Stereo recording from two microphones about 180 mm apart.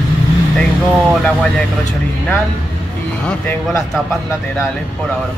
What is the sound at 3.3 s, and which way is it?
Speech, 10° left (ahead or behind).